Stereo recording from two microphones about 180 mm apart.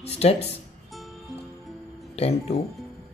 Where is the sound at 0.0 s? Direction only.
35° left (ahead or behind).